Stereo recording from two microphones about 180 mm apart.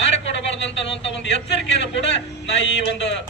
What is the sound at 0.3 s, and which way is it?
A man's voice, 85° left.